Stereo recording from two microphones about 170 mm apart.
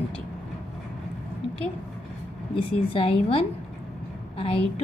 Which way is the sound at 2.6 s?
35° left (ahead or behind).